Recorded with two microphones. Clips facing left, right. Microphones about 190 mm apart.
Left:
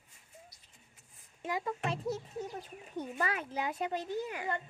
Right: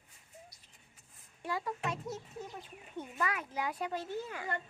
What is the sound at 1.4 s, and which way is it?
Speech, 20° left (ahead or behind).